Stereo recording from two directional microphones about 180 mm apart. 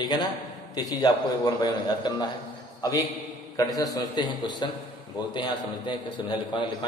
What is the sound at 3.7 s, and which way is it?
A man's voice, 20° left (ahead or behind).